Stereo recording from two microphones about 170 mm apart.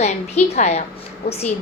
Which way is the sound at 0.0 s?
40° left (ahead or behind).